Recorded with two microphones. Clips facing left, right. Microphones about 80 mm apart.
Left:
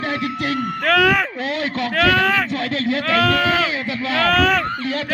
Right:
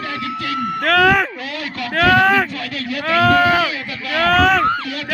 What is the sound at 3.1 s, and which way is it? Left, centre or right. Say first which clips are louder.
Speech: right 5 dB; centre.